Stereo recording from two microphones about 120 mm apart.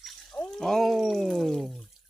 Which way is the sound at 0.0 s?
5° left (ahead or behind).